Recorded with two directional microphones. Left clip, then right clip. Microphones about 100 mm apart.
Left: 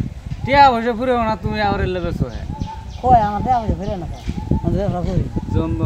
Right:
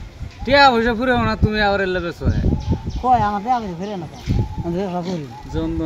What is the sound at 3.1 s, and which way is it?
Speech, 25° left (ahead or behind).